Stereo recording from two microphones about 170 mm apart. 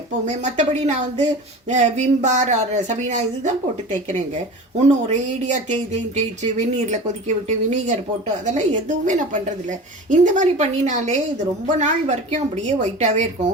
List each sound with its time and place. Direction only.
0.3 s speech: 45° right (ahead or behind)
4.9 s speech: 40° right (ahead or behind)